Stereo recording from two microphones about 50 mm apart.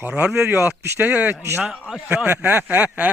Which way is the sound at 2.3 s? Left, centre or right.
Right.